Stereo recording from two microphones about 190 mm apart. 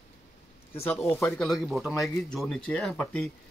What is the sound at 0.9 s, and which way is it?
A man's voice, 10° left (ahead or behind).